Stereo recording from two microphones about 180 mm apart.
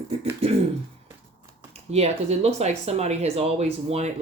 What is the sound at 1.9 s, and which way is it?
Speech, 35° right (ahead or behind).